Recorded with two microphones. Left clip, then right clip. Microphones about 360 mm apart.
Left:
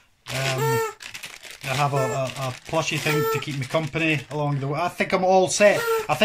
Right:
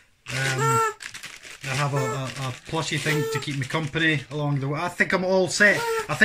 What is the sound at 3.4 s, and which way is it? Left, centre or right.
Speech, centre.